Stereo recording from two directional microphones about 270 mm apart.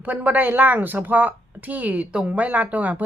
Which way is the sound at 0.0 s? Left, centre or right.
Centre.